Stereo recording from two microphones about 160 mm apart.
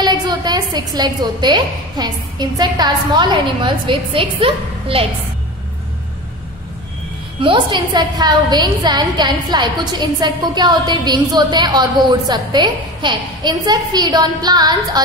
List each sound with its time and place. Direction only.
0.0 s a woman's voice: 25° right (ahead or behind)
7.3 s a woman's voice: 30° right (ahead or behind)